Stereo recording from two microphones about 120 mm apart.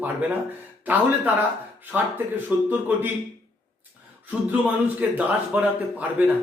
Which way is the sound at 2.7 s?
15° right (ahead or behind).